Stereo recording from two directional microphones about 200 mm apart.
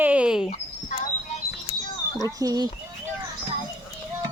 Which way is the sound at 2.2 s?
15° right (ahead or behind).